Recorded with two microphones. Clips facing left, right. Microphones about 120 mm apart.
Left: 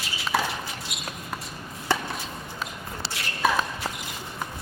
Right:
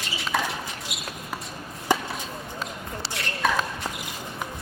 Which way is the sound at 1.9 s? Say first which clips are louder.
Right 2 dB; 15° right (ahead or behind).